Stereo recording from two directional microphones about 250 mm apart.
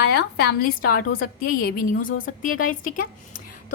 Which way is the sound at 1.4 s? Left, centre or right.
Left.